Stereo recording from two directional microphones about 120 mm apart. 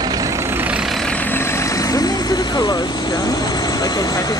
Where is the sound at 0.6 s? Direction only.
10° right (ahead or behind).